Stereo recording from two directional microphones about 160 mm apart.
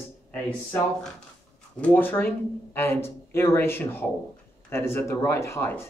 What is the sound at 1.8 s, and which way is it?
Speech, 10° left (ahead or behind).